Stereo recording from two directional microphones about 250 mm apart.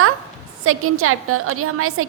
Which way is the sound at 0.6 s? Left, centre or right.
Right.